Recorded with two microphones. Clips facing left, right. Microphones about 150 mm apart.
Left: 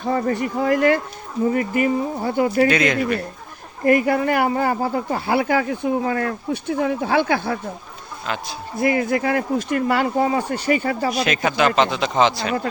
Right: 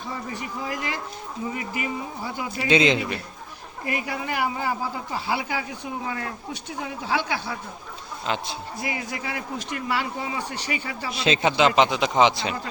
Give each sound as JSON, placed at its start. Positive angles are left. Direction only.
{"t": 0.0, "sound": "speech", "side_deg": 60}
{"t": 2.6, "sound": "speech", "side_deg": -20}
{"t": 3.8, "sound": "speech", "side_deg": 55}
{"t": 8.3, "sound": "speech", "side_deg": -25}
{"t": 8.8, "sound": "speech", "side_deg": 55}
{"t": 11.1, "sound": "speech", "side_deg": -25}